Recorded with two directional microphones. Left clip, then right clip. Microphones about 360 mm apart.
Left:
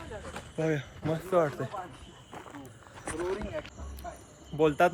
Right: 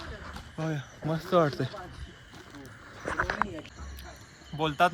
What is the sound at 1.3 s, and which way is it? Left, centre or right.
Speech, right.